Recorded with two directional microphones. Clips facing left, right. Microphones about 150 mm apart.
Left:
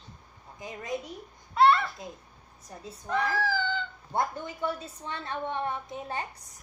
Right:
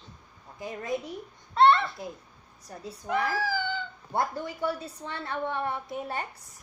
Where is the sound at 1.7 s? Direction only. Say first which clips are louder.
Right 1 dB; 5° left (ahead or behind).